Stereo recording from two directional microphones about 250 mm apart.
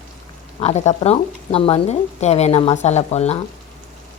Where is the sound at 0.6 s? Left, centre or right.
Left.